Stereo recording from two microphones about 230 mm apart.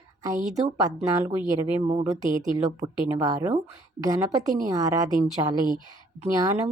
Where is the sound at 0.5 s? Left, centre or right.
Centre.